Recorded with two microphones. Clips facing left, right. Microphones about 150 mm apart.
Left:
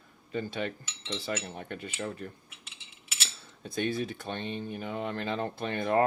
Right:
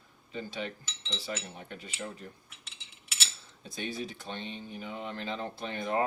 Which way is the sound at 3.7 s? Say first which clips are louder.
Left 6 dB; 55° left (ahead or behind).